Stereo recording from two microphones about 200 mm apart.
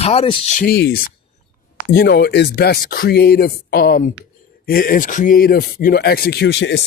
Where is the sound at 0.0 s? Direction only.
30° left (ahead or behind).